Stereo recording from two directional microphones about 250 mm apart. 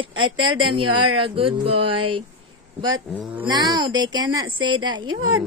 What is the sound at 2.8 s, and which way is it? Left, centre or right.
Speech, centre.